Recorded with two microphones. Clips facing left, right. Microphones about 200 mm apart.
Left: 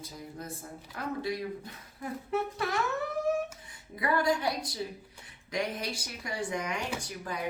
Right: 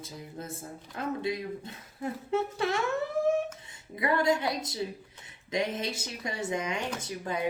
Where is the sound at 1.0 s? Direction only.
25° right (ahead or behind).